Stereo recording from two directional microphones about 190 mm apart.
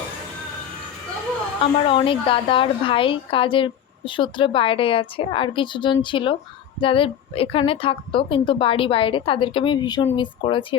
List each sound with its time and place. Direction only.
1.9 s a woman's voice: 25° left (ahead or behind)